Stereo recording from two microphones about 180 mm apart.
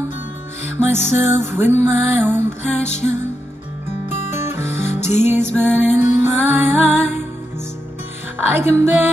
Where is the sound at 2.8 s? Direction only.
40° left (ahead or behind).